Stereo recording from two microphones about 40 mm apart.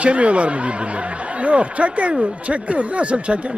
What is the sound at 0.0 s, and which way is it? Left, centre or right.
Speech, right.